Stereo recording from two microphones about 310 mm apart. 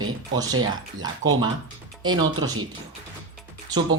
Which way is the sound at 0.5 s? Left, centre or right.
Right.